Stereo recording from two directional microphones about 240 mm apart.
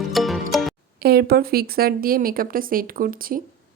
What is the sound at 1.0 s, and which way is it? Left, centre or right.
A woman's voice, right.